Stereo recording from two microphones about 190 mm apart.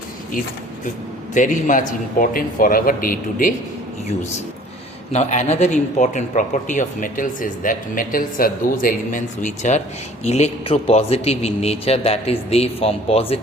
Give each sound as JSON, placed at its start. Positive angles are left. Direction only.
{"t": 1.3, "sound": "speech", "side_deg": 40}
{"t": 5.1, "sound": "speech", "side_deg": 35}